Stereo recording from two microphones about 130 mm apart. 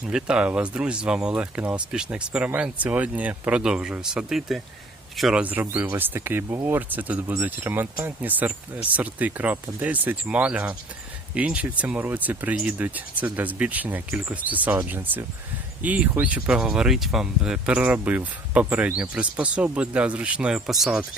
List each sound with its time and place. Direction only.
0.1 s a man's voice: 5° right (ahead or behind)
5.4 s speech: 10° right (ahead or behind)